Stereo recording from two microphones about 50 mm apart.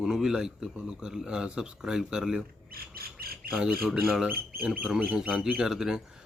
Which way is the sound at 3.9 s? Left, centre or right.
Centre.